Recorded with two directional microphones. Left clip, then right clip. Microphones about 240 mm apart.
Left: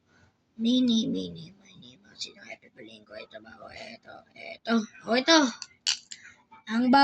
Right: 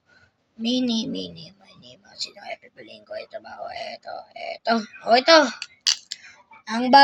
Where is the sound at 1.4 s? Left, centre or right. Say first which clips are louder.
Right 5 dB; right.